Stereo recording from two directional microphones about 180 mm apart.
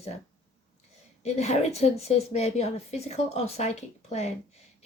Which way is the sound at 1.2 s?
35° left (ahead or behind).